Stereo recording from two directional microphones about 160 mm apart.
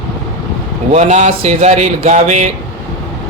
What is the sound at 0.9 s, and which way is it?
Speech, 45° right (ahead or behind).